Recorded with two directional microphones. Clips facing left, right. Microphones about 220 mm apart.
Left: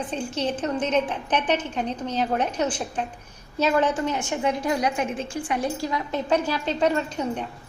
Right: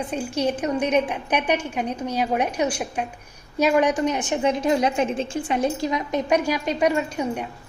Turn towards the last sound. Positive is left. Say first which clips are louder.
# right 2 dB
turn(degrees=-10)  # may be behind; listen again after turning